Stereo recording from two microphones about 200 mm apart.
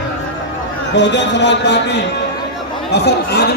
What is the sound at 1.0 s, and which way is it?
A man's voice, 60° left (ahead or behind).